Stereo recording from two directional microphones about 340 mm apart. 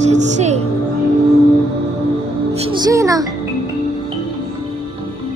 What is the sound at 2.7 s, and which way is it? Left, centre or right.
Music, centre.